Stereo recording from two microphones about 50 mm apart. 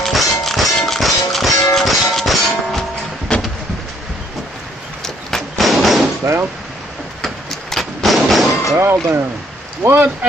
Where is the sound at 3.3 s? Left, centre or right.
Left.